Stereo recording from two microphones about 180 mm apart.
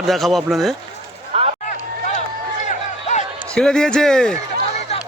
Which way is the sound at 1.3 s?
35° right (ahead or behind).